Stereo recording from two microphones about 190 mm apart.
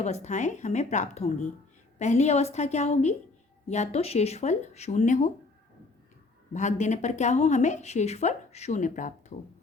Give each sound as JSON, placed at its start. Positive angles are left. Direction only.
{"t": 0.0, "sound": "a woman's voice", "side_deg": 35}
{"t": 6.5, "sound": "a woman's voice", "side_deg": 40}